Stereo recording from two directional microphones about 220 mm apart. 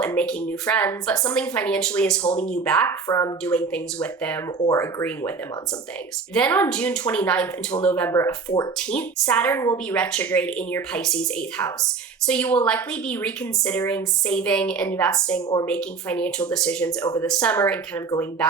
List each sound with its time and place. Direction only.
0.0 s a woman's voice: 5° left (ahead or behind)
6.3 s a woman's voice: 5° left (ahead or behind)
17.0 s speech: 20° left (ahead or behind)
17.2 s speech: 5° left (ahead or behind)